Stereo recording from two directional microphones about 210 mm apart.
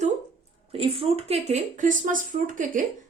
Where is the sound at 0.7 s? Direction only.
25° right (ahead or behind).